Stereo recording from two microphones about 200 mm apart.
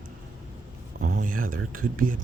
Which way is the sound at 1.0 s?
45° right (ahead or behind).